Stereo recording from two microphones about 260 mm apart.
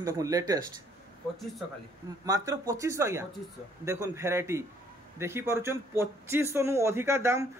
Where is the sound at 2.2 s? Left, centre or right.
Centre.